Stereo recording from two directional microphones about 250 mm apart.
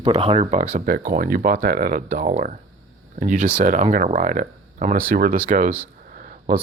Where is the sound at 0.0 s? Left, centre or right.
Right.